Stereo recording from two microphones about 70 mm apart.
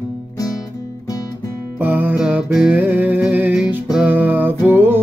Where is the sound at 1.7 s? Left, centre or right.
Right.